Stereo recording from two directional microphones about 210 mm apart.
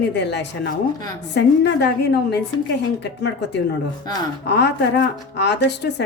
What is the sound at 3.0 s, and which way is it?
Speech, 55° left (ahead or behind).